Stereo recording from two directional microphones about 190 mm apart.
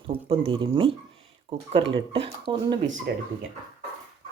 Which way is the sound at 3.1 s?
55° right (ahead or behind).